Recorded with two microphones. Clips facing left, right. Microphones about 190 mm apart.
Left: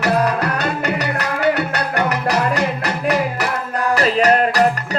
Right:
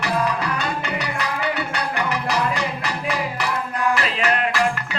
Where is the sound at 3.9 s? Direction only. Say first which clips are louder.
Left 8 dB; 40° left (ahead or behind).